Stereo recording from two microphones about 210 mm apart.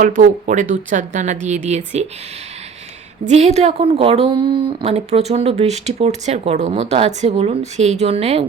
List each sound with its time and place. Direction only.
0.0 s a woman's voice: 35° right (ahead or behind)
3.2 s a woman's voice: 30° right (ahead or behind)